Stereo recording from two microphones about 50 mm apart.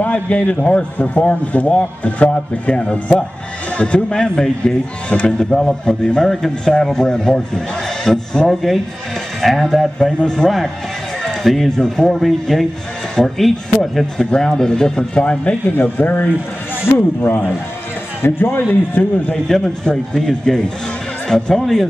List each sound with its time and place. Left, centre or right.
0.0 s a man's voice: left
5.5 s speech: centre
5.9 s speech: centre
15.7 s a man's voice: left
19.0 s speech: left
19.3 s speech: centre